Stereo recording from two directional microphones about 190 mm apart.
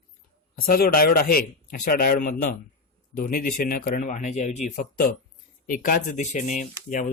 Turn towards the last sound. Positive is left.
turn(degrees=45)  # may be behind; listen again after turning